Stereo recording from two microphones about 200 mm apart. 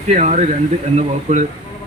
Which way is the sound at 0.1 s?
35° right (ahead or behind).